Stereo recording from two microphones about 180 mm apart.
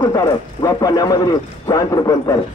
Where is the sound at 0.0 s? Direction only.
20° left (ahead or behind).